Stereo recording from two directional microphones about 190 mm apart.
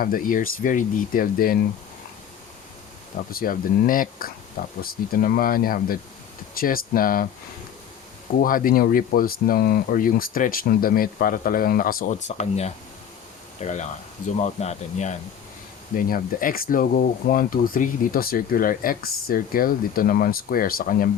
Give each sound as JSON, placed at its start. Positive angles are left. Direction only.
{"t": 0.0, "sound": "speech", "side_deg": 50}
{"t": 3.3, "sound": "speech", "side_deg": 50}
{"t": 8.4, "sound": "speech", "side_deg": 45}
{"t": 12.4, "sound": "speech", "side_deg": 35}
{"t": 16.0, "sound": "speech", "side_deg": 50}